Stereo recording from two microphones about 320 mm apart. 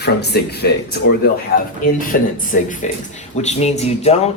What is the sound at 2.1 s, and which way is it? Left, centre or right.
Speech, left.